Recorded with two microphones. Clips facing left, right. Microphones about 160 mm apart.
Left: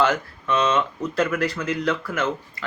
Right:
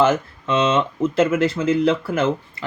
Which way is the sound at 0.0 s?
25° right (ahead or behind).